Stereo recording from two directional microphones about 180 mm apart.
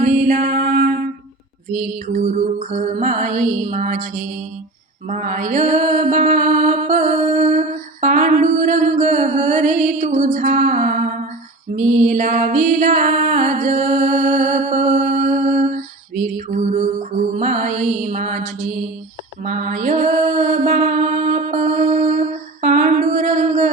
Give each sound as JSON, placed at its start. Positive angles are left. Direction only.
{"t": 0.0, "sound": "mantra", "side_deg": -40}
{"t": 11.8, "sound": "music", "side_deg": -45}
{"t": 19.5, "sound": "mantra", "side_deg": -45}